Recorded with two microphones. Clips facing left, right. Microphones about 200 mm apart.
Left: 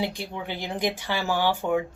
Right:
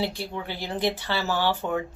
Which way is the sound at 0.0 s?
15° left (ahead or behind).